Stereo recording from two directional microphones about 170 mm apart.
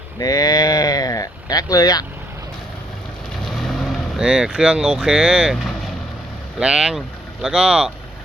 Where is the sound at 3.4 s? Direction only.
Centre (ahead or behind).